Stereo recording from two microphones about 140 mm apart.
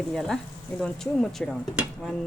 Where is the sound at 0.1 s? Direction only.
Centre (ahead or behind).